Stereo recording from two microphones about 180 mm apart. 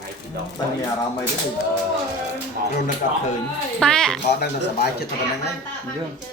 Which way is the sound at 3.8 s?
5° left (ahead or behind).